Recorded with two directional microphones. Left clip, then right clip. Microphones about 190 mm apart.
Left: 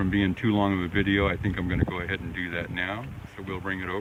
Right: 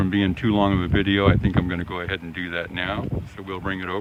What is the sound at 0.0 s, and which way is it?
Speech, 20° right (ahead or behind).